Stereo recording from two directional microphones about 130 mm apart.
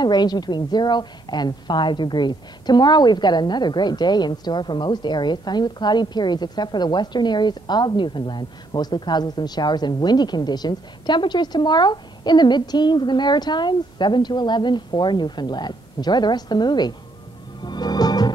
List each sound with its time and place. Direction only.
0.0 s a woman's voice: 35° left (ahead or behind)
17.6 s music: 35° left (ahead or behind)